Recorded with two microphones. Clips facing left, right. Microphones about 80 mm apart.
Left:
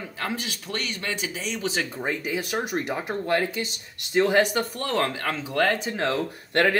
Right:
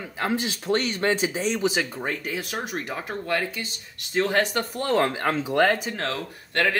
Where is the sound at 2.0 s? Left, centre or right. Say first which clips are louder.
Left 2 dB; centre.